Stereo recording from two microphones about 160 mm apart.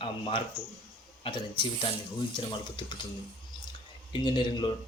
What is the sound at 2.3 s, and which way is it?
Speech, 30° left (ahead or behind).